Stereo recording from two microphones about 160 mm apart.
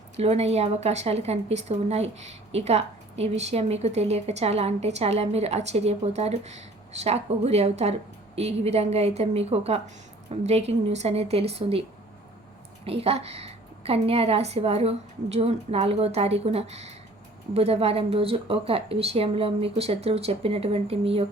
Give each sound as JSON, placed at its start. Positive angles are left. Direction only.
{"t": 0.2, "sound": "a woman's voice", "side_deg": -40}
{"t": 12.8, "sound": "a woman's voice", "side_deg": -35}